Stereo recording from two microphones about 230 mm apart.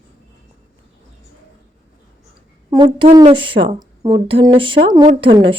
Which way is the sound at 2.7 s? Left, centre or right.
Centre.